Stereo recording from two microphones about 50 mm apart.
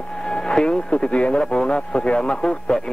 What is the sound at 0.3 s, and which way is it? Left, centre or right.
Speech, centre.